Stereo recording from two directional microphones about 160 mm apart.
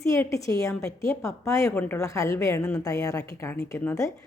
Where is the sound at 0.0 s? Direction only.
20° left (ahead or behind).